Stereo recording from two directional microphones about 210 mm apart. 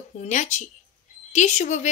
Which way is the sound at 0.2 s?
35° left (ahead or behind).